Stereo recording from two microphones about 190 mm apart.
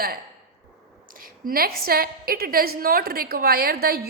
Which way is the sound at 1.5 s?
50° right (ahead or behind).